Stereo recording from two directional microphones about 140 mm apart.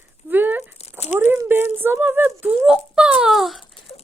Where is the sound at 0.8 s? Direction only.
50° left (ahead or behind).